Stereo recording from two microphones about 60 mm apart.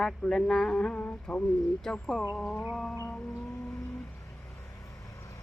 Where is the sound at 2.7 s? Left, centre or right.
Centre.